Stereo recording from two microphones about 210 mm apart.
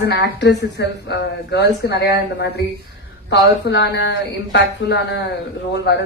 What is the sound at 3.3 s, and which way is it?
A woman's voice, 55° left (ahead or behind).